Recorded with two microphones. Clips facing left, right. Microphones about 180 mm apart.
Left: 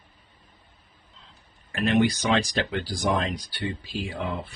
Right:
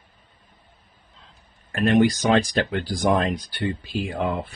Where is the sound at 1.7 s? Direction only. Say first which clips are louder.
Right 4 dB; 50° right (ahead or behind).